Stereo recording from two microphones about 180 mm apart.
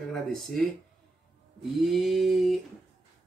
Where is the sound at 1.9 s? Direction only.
Centre (ahead or behind).